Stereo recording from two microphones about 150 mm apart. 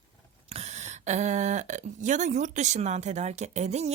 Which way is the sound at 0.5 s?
50° right (ahead or behind).